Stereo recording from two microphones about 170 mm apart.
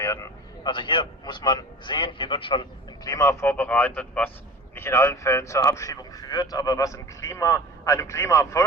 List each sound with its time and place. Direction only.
0.0 s a man's voice: 20° left (ahead or behind)